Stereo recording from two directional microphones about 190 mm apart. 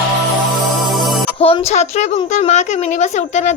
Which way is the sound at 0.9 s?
Centre (ahead or behind).